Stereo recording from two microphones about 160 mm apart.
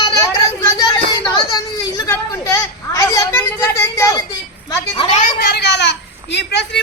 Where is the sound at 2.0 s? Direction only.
20° left (ahead or behind).